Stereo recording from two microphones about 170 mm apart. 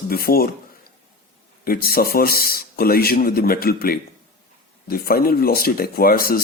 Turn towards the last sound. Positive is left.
turn(degrees=60)  # may be behind; listen again after turning